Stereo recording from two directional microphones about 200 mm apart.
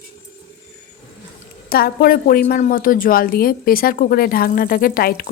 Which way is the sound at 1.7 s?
50° left (ahead or behind).